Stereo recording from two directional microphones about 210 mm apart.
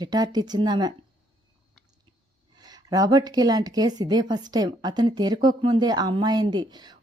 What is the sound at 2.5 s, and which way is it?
A woman's voice, 20° right (ahead or behind).